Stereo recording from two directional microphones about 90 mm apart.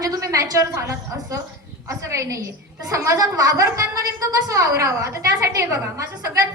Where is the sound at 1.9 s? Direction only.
35° right (ahead or behind).